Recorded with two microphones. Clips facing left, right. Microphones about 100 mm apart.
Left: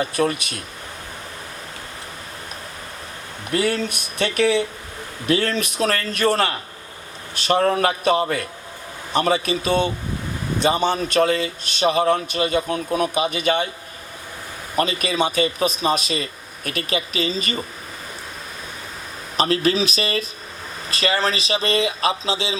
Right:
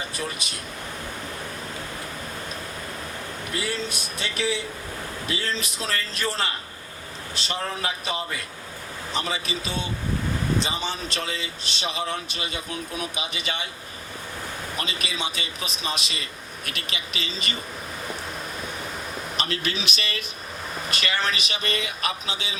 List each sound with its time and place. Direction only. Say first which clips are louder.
0.0 s a man's voice: left 11 dB; 60° left (ahead or behind)
3.5 s a man's voice: left 9 dB; 60° left (ahead or behind)
14.8 s a man's voice: left 12 dB; 45° left (ahead or behind)
19.4 s speech: left 11 dB; 35° left (ahead or behind)